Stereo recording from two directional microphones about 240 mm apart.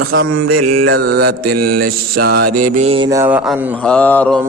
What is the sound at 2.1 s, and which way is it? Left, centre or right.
Music, right.